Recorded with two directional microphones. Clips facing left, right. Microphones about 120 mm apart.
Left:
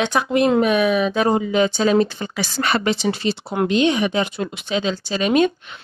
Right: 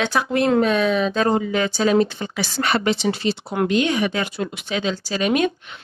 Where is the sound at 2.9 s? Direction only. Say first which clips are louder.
Even; 40° left (ahead or behind).